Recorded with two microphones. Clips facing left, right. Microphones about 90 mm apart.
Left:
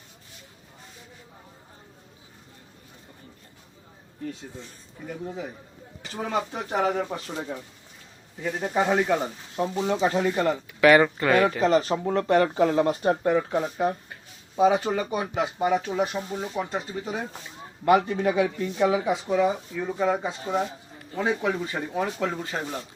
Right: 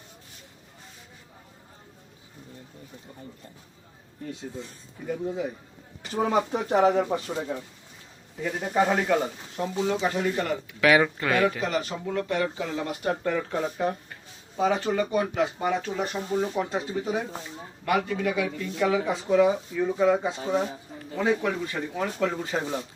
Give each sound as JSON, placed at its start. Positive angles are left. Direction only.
{"t": 5.0, "sound": "speech", "side_deg": -5}
{"t": 6.2, "sound": "speech", "side_deg": -15}
{"t": 6.9, "sound": "speech", "side_deg": -10}
{"t": 8.4, "sound": "speech", "side_deg": 0}
{"t": 9.6, "sound": "speech", "side_deg": 30}
{"t": 10.8, "sound": "speech", "side_deg": 0}
{"t": 11.6, "sound": "speech", "side_deg": 35}
{"t": 13.0, "sound": "speech", "side_deg": 25}
{"t": 17.8, "sound": "speech", "side_deg": 30}
{"t": 18.9, "sound": "speech", "side_deg": 15}
{"t": 19.4, "sound": "speech", "side_deg": 0}
{"t": 22.2, "sound": "speech", "side_deg": 0}